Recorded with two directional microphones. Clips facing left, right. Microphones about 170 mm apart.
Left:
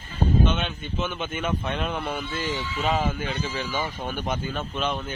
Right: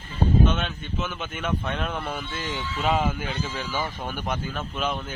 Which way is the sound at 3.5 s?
5° left (ahead or behind).